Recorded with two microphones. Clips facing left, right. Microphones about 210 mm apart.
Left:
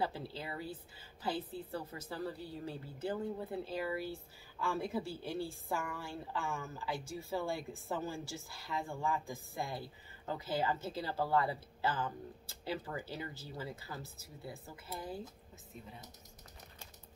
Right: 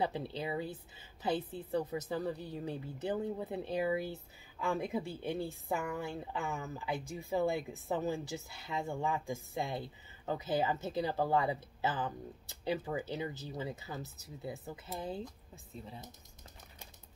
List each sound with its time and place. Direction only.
0.0 s a woman's voice: 20° right (ahead or behind)